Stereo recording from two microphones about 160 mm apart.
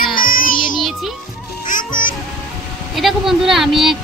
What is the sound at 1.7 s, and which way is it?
Music, 55° left (ahead or behind).